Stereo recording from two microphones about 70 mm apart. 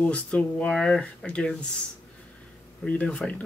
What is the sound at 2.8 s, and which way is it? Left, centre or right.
Speech, centre.